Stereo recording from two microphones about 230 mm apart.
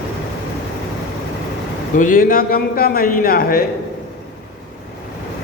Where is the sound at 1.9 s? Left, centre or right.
Left.